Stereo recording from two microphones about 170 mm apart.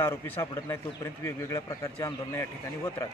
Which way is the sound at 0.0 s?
15° left (ahead or behind).